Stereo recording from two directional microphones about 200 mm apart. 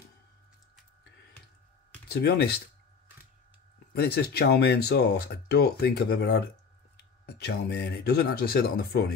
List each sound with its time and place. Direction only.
2.0 s speech: 55° left (ahead or behind)
3.9 s speech: 50° left (ahead or behind)